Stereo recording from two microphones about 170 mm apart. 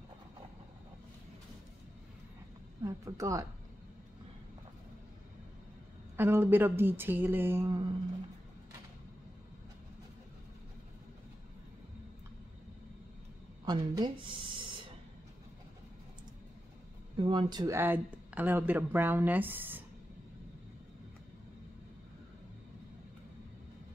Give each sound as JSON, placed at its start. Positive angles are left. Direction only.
{"t": 2.8, "sound": "speech", "side_deg": -20}
{"t": 6.1, "sound": "speech", "side_deg": -15}
{"t": 13.7, "sound": "speech", "side_deg": -25}
{"t": 17.2, "sound": "speech", "side_deg": -30}